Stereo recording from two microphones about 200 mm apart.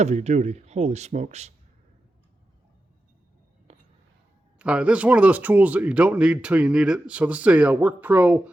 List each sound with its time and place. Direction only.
0.0 s speech: 35° right (ahead or behind)
3.7 s a sound: 30° right (ahead or behind)
4.5 s speech: 5° right (ahead or behind)